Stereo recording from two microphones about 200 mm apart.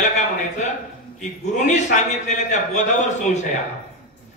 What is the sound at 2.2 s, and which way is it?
Speech, 35° left (ahead or behind).